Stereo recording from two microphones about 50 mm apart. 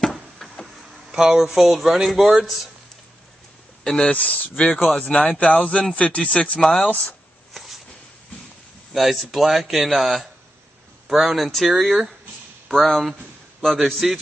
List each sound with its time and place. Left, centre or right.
0.0 s tick-tock: centre
1.1 s speech: centre
3.8 s speech: centre
4.1 s speech: left
7.5 s a sound: centre
8.9 s speech: centre